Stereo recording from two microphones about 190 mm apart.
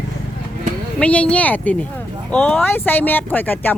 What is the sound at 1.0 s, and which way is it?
Speech, 5° left (ahead or behind).